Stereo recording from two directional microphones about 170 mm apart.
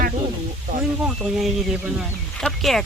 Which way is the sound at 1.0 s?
Centre (ahead or behind).